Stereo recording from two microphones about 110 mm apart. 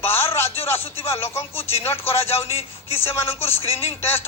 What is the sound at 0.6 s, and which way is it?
Speech, 20° left (ahead or behind).